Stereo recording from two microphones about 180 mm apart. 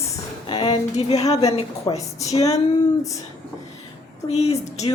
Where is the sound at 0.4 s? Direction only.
30° left (ahead or behind).